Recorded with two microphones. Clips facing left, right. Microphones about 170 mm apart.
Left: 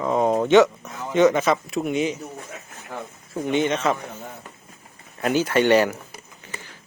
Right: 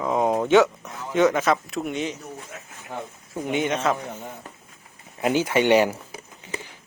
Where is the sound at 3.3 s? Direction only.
10° right (ahead or behind).